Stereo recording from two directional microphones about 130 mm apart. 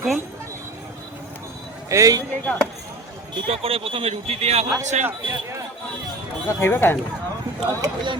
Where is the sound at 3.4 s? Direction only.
45° right (ahead or behind).